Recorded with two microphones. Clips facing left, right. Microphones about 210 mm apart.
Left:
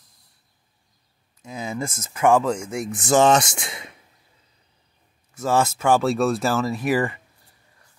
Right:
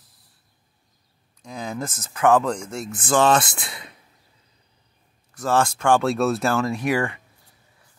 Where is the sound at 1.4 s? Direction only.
5° left (ahead or behind).